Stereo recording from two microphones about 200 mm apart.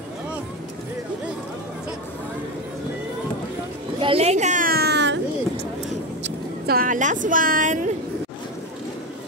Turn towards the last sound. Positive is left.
turn(degrees=-40)  # may be behind; listen again after turning